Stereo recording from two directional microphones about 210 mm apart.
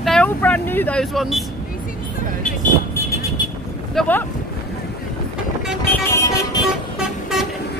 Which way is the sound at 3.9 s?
10° left (ahead or behind).